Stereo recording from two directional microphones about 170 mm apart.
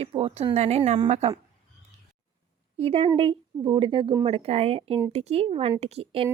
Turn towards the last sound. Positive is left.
turn(degrees=-35)  # may be behind; listen again after turning